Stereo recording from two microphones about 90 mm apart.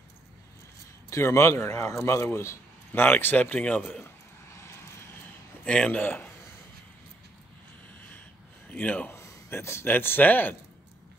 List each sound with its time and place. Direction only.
1.1 s a man's voice: 30° left (ahead or behind)
5.7 s a man's voice: 15° left (ahead or behind)
8.6 s speech: 20° left (ahead or behind)
9.1 s speech: 30° left (ahead or behind)